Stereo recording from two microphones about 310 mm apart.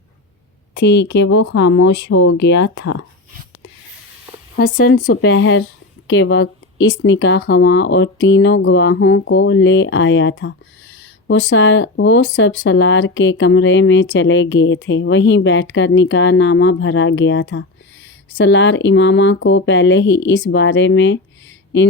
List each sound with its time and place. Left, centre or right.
0.7 s speech: left
2.8 s speech: left
4.6 s speech: left